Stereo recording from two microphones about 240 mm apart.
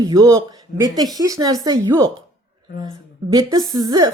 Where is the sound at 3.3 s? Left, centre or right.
Centre.